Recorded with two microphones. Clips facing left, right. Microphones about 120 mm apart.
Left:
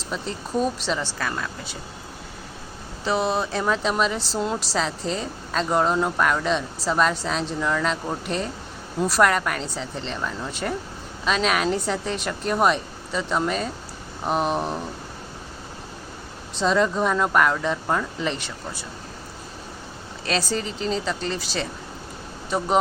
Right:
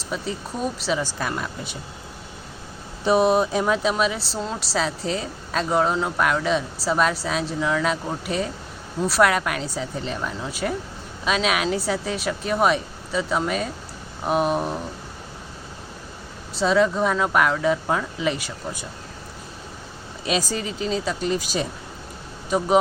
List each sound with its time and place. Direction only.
0.1 s speech: 5° right (ahead or behind)
3.0 s speech: 20° right (ahead or behind); by 14.8 s 5° right (ahead or behind)
16.6 s speech: 5° right (ahead or behind)
20.2 s speech: 10° right (ahead or behind)